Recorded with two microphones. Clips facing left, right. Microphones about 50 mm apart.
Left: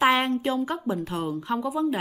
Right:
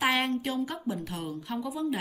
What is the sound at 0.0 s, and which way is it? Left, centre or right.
A woman's voice, left.